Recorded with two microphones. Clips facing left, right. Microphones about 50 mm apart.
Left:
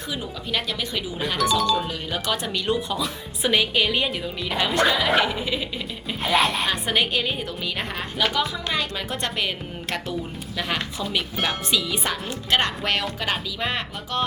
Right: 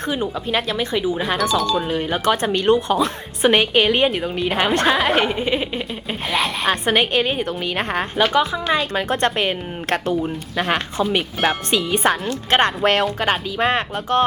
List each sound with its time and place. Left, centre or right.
0.5 s speech: right
1.5 s a woman's voice: centre
1.9 s a woman's voice: right
6.2 s a woman's voice: centre
6.7 s a woman's voice: right